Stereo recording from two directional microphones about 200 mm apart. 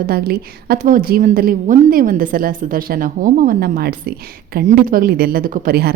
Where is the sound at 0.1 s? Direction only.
50° right (ahead or behind).